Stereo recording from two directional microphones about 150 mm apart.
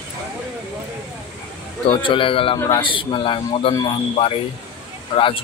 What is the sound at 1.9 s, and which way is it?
Speech, 35° left (ahead or behind).